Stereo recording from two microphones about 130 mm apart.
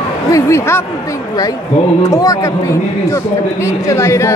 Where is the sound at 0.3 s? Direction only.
20° left (ahead or behind).